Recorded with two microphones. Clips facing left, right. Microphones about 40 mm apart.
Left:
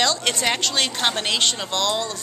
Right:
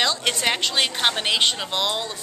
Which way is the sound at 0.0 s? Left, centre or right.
Centre.